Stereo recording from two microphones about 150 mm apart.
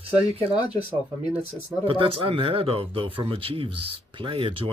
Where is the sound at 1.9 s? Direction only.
35° right (ahead or behind).